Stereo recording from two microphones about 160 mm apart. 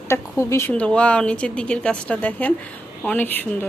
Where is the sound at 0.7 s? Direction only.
5° left (ahead or behind).